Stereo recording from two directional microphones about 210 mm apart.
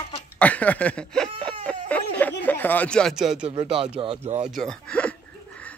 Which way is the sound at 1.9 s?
5° left (ahead or behind).